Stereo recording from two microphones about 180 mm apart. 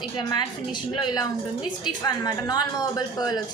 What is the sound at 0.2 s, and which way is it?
A woman's voice, 25° left (ahead or behind).